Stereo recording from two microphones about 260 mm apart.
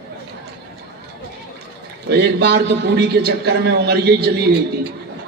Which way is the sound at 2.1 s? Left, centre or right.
Right.